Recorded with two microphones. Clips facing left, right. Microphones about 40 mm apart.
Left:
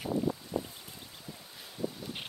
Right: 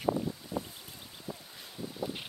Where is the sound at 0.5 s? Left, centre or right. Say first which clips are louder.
Left 1 dB; centre.